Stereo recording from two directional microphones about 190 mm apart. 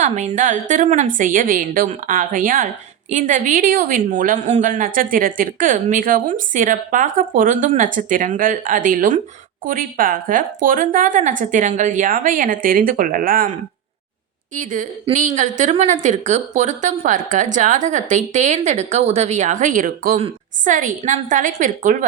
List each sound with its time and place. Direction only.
0.0 s a woman's voice: 40° right (ahead or behind)
14.5 s a woman's voice: 40° right (ahead or behind)